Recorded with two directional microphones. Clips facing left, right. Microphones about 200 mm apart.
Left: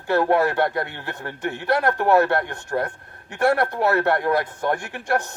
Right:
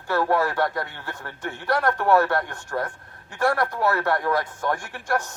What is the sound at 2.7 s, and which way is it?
A man's voice, 35° left (ahead or behind).